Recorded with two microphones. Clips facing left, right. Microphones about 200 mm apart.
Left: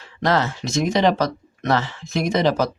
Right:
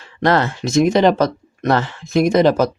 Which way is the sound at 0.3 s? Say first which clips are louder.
Right 4 dB; 60° right (ahead or behind).